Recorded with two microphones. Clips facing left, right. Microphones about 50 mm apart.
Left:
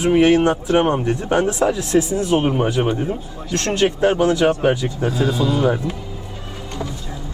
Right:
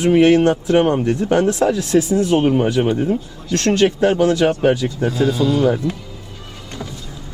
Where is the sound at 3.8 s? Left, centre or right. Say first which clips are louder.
Even; left.